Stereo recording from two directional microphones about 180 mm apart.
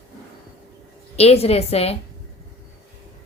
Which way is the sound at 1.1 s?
35° left (ahead or behind).